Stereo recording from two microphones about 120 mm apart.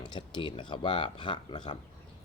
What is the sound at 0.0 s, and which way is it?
Speech, 40° left (ahead or behind).